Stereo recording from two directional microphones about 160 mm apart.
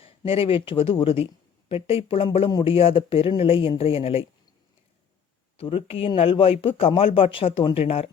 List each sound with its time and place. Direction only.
0.0 s speech: 35° left (ahead or behind)
5.5 s speech: 35° left (ahead or behind)